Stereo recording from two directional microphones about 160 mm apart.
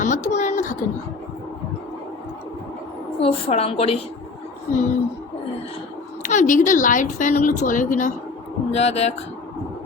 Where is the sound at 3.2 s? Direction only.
35° left (ahead or behind).